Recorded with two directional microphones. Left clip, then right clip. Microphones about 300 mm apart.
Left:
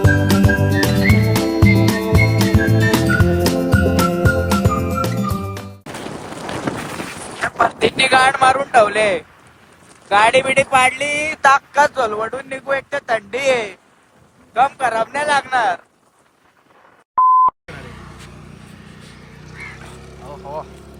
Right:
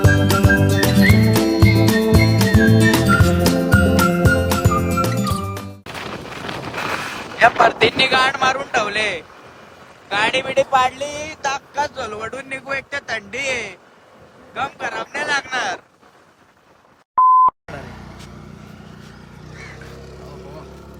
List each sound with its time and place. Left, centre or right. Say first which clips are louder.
0.0 s music: even; centre
7.8 s vehicle: left 2 dB; centre
10.1 s speech: left 6 dB; centre
17.2 s sidetone: even; centre
17.7 s telephone dialing: right 2 dB; right